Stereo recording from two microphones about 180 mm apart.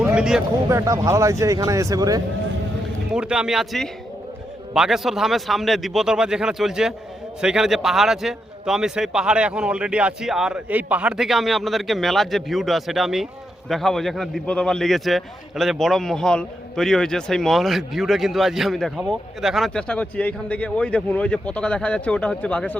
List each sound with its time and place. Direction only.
0.0 s a sound: 5° right (ahead or behind)
0.7 s speech: 15° right (ahead or behind)
3.1 s a man's voice: 5° right (ahead or behind)